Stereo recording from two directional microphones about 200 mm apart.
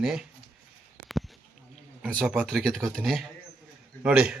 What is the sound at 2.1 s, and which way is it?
Speech, 5° left (ahead or behind).